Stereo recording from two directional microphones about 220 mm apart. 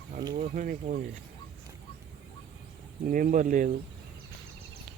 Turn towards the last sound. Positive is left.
turn(degrees=-35)  # may be behind; listen again after turning